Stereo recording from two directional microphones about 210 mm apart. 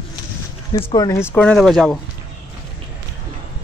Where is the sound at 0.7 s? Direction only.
20° left (ahead or behind); by 1.9 s 5° left (ahead or behind).